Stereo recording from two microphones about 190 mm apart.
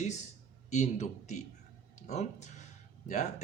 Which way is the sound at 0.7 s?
40° left (ahead or behind).